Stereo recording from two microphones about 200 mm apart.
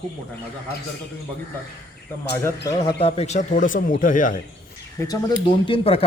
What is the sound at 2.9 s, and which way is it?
A man's voice, 30° left (ahead or behind).